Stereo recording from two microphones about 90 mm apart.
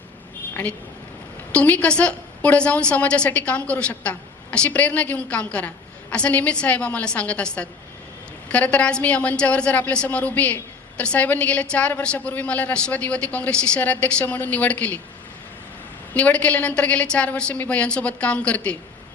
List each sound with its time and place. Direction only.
1.5 s a woman's voice: 15° left (ahead or behind)
16.1 s a woman's voice: 15° left (ahead or behind)